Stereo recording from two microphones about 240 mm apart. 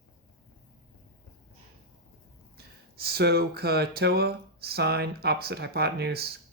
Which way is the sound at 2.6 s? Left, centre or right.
Right.